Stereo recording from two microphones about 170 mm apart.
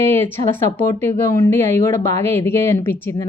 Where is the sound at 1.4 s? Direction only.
15° left (ahead or behind).